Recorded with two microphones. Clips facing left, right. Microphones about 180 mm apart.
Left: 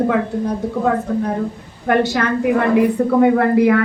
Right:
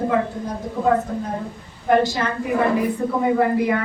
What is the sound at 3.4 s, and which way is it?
Speech, 70° left (ahead or behind).